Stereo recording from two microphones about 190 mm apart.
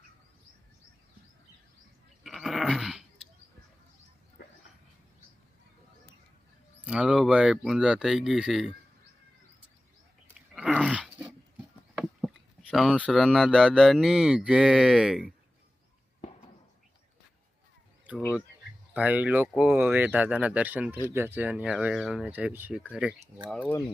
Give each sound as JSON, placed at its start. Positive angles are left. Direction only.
{"t": 2.2, "sound": "a sound", "side_deg": 0}
{"t": 6.8, "sound": "speech", "side_deg": -5}
{"t": 10.5, "sound": "dog", "side_deg": -5}
{"t": 11.9, "sound": "a sound", "side_deg": 0}
{"t": 12.7, "sound": "speech", "side_deg": 0}
{"t": 18.9, "sound": "speech", "side_deg": -5}
{"t": 23.6, "sound": "speech", "side_deg": 15}